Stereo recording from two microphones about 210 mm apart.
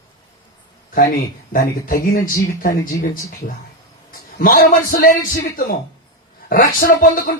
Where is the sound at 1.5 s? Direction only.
40° left (ahead or behind).